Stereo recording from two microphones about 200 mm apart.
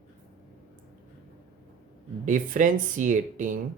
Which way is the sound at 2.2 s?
40° right (ahead or behind).